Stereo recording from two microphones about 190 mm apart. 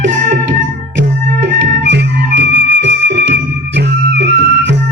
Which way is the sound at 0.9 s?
65° right (ahead or behind).